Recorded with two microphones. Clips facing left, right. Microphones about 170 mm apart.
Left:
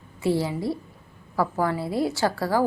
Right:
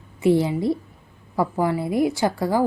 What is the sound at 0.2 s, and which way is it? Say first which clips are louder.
A woman's voice: right 5 dB; 20° right (ahead or behind).